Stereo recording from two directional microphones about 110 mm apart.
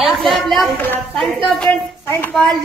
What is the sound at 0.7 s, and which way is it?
Speech, 15° left (ahead or behind).